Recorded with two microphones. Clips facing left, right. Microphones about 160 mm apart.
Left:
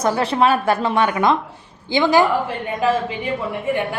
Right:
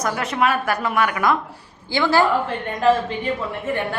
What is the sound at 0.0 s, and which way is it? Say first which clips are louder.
A woman's voice: left 4 dB; 30° left (ahead or behind).